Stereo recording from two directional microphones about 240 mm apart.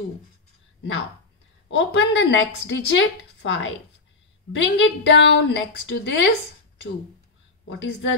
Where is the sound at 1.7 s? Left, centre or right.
Left.